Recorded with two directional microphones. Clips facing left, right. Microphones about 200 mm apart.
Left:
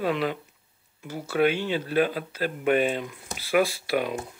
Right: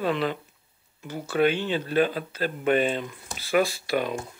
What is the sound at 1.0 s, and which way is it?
Speech, 5° left (ahead or behind).